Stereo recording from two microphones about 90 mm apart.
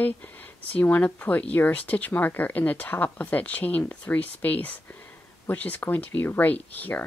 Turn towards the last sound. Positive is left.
turn(degrees=20)  # may be behind; listen again after turning